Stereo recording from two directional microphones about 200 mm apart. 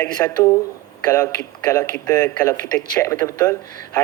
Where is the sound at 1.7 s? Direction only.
15° left (ahead or behind).